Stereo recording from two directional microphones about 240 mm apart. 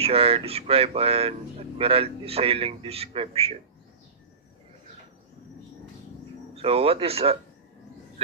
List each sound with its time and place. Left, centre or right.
0.0 s speech: right
6.5 s speech: right